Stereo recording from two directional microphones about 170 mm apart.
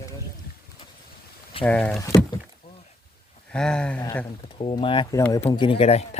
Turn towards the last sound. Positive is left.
turn(degrees=35)  # may be behind; listen again after turning